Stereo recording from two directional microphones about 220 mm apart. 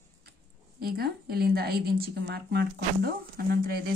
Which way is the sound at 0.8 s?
45° right (ahead or behind).